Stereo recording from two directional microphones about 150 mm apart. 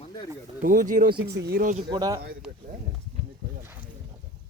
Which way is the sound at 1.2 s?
90° right.